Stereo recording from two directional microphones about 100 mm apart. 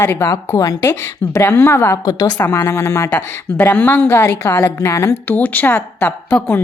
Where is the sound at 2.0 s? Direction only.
40° left (ahead or behind).